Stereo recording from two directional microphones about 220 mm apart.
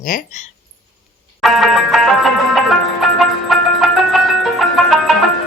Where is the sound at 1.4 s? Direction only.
Centre (ahead or behind).